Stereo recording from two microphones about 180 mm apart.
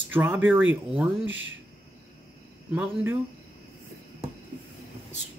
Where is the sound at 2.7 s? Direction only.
10° right (ahead or behind).